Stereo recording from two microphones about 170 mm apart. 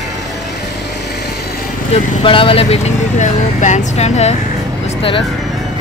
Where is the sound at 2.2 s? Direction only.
30° left (ahead or behind).